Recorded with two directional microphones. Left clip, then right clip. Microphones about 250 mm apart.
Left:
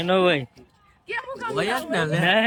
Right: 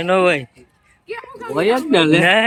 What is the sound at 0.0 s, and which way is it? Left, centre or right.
Speech, centre.